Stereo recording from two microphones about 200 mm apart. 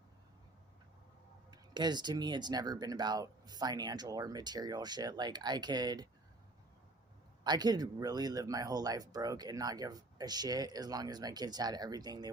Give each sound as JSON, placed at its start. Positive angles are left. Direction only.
{"t": 1.5, "sound": "speech", "side_deg": -20}
{"t": 7.4, "sound": "speech", "side_deg": -20}